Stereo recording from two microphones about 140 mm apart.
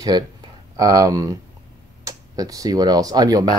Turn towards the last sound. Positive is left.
turn(degrees=-25)  # may be behind; listen again after turning